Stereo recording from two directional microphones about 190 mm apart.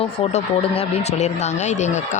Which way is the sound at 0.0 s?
35° left (ahead or behind).